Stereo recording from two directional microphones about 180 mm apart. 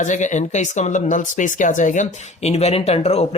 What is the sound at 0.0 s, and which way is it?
Speech, 45° left (ahead or behind).